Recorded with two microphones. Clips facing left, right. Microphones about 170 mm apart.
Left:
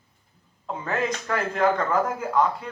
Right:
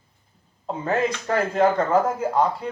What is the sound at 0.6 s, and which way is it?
Speech, 35° right (ahead or behind).